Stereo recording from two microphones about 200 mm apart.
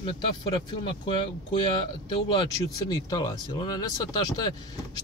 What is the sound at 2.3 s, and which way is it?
Speech, 20° left (ahead or behind).